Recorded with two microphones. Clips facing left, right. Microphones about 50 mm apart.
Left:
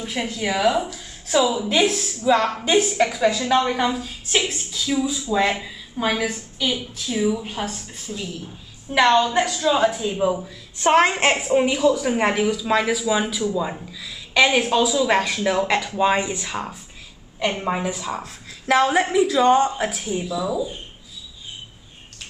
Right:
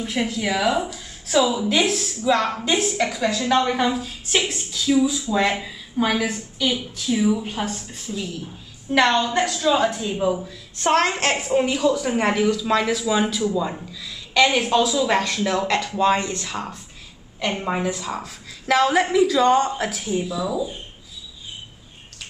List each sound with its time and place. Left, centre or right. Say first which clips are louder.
0.0 s a woman's voice: right 2 dB; centre
10.9 s a woman's voice: left 3 dB; centre
11.3 s a woman's voice: left 1 dB; centre